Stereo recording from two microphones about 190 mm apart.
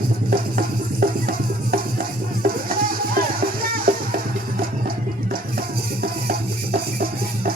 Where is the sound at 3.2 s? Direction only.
50° right (ahead or behind).